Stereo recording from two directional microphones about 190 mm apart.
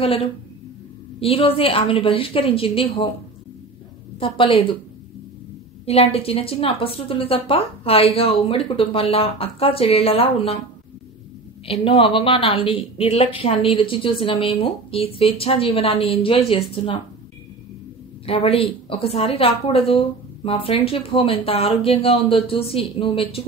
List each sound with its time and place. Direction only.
0.0 s a woman's voice: 30° left (ahead or behind)
4.2 s a woman's voice: 30° left (ahead or behind)
5.9 s a woman's voice: 30° left (ahead or behind)
11.6 s a woman's voice: 30° left (ahead or behind)
18.2 s a woman's voice: 30° left (ahead or behind)